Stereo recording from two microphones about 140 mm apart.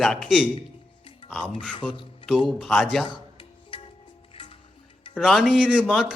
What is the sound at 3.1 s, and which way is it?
Music, 35° left (ahead or behind).